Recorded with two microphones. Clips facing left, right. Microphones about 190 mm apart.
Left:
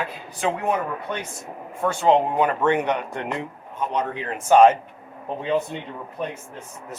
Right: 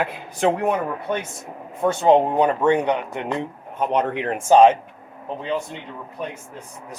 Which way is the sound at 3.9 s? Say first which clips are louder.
Right 6 dB; 60° right (ahead or behind).